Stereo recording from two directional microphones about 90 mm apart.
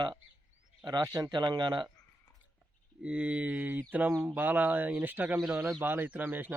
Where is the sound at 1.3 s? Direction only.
55° right (ahead or behind).